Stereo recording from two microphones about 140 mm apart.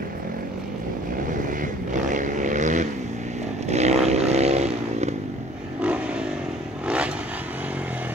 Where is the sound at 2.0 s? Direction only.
65° right (ahead or behind).